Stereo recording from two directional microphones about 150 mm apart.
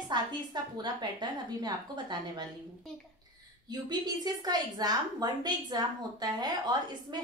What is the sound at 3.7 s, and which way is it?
A woman's voice, 25° right (ahead or behind).